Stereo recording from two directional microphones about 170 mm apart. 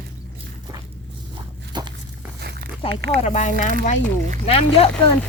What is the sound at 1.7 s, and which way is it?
Walk, 25° right (ahead or behind).